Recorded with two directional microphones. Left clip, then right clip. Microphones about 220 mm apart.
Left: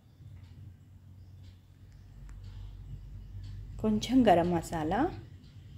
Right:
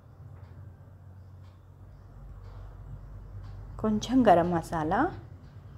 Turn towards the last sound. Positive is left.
turn(degrees=0)  # may be behind; listen again after turning